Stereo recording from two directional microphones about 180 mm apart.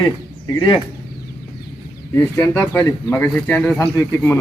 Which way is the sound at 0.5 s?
25° left (ahead or behind).